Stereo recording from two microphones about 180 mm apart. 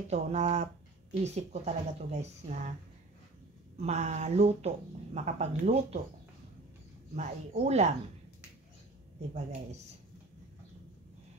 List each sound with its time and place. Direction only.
0.1 s speech: 40° right (ahead or behind)
3.8 s speech: 40° right (ahead or behind)
7.2 s speech: 40° right (ahead or behind)
9.3 s speech: 35° right (ahead or behind)